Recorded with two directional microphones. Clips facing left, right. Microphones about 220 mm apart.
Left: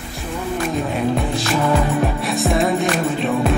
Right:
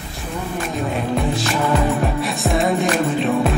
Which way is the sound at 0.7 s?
Centre (ahead or behind).